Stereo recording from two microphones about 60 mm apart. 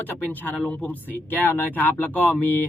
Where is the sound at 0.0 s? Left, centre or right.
Left.